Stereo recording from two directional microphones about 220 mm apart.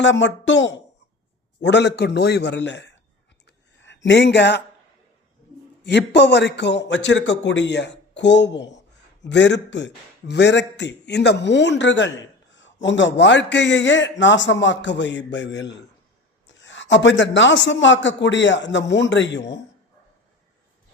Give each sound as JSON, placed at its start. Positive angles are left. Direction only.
{"t": 0.0, "sound": "a man's voice", "side_deg": 55}
{"t": 3.4, "sound": "a sound", "side_deg": 55}
{"t": 5.8, "sound": "a man's voice", "side_deg": 50}